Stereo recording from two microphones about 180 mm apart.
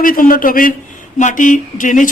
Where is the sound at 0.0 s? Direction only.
50° left (ahead or behind).